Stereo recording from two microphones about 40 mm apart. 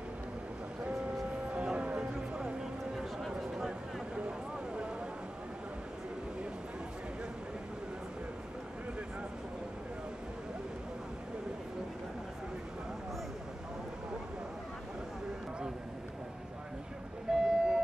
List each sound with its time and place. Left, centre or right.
1.5 s music: right
3.2 s a sound: centre
17.3 s vehicle: centre